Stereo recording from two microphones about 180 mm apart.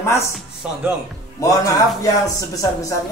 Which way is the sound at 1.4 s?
20° left (ahead or behind).